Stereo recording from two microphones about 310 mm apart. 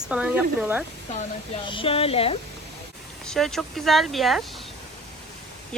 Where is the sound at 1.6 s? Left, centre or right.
Centre.